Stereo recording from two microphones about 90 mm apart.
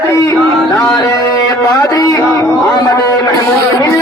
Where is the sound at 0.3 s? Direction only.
Centre (ahead or behind).